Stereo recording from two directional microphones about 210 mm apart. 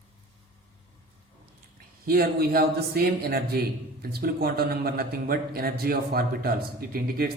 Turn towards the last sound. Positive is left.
turn(degrees=-45)  # may be behind; listen again after turning